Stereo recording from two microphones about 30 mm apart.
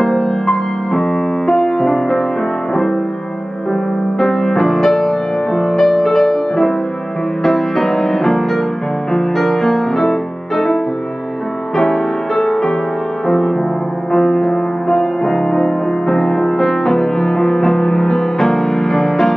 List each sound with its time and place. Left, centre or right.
0.0 s music: centre
4.2 s music: centre